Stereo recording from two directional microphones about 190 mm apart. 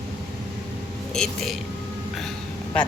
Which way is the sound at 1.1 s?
Centre (ahead or behind).